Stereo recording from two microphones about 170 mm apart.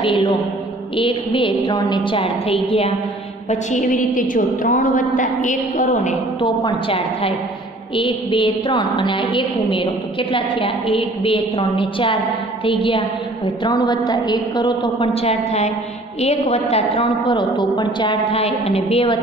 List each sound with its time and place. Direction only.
0.0 s a woman's voice: 30° left (ahead or behind)
3.4 s a woman's voice: 50° left (ahead or behind)
6.4 s a woman's voice: 30° left (ahead or behind)